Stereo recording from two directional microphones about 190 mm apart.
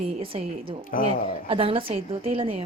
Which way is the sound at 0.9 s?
45° left (ahead or behind).